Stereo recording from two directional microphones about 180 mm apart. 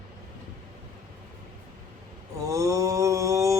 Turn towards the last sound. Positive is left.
turn(degrees=-15)  # may be behind; listen again after turning